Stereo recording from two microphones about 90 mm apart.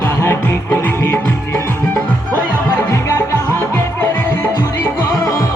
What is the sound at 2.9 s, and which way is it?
Music, 30° left (ahead or behind).